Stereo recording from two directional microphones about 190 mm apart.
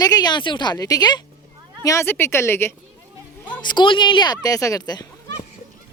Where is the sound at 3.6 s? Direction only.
25° left (ahead or behind).